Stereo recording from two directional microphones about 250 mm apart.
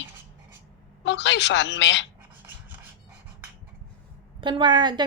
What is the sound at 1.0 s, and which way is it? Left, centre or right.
Speech, left.